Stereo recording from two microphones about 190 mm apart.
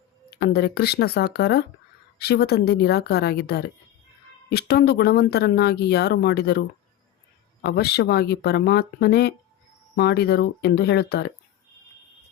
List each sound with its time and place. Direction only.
0.3 s speech: 55° left (ahead or behind)
7.6 s speech: 60° left (ahead or behind)